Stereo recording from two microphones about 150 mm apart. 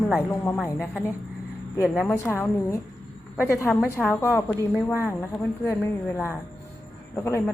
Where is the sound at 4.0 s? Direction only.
Centre (ahead or behind).